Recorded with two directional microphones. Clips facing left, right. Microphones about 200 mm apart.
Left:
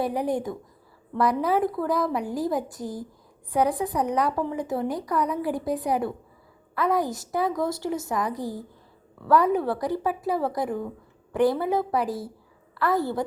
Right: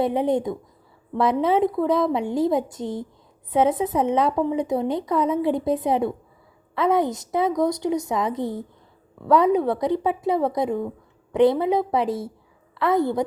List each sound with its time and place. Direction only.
0.0 s a woman's voice: 20° right (ahead or behind)
12.0 s speech: centre (ahead or behind)
12.8 s a woman's voice: 20° right (ahead or behind)